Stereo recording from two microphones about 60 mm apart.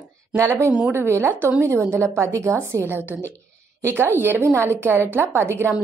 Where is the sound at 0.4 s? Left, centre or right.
Right.